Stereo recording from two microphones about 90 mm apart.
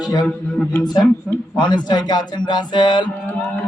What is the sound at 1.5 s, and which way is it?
Speech, 55° left (ahead or behind).